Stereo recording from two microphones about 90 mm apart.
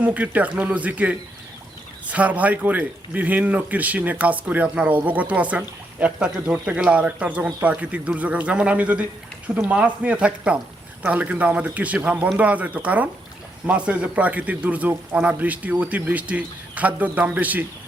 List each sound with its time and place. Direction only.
0.0 s speech: 15° right (ahead or behind)